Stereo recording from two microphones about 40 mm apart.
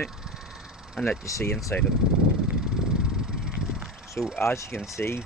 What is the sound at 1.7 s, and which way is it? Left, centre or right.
Speech, left.